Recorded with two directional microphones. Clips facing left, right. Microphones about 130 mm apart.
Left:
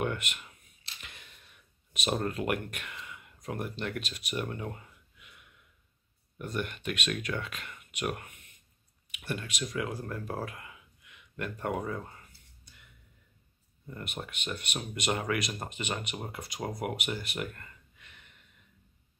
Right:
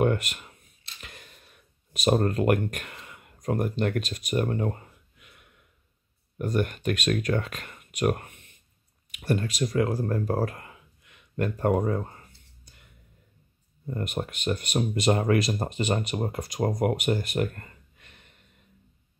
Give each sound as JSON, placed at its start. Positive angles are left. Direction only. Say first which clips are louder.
{"t": 0.0, "sound": "a sound", "louder": "right 9 dB", "side_deg": -40}
{"t": 2.0, "sound": "speech", "louder": "right 8 dB", "side_deg": -45}
{"t": 13.8, "sound": "speech", "louder": "right 9 dB", "side_deg": -40}